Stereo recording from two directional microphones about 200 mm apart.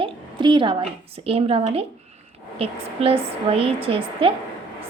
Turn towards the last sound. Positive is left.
turn(degrees=-30)  # may be behind; listen again after turning